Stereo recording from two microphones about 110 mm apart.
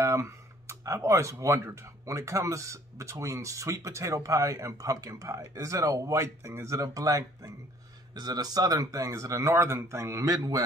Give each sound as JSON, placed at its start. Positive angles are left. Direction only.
{"t": 0.0, "sound": "speech", "side_deg": -25}